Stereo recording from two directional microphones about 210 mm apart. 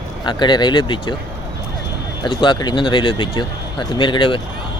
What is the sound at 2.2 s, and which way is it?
Speech, 20° left (ahead or behind).